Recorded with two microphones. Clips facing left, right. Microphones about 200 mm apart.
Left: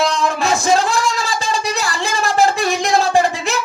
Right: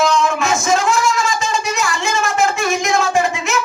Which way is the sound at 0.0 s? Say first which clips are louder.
Right 2 dB; 35° left (ahead or behind).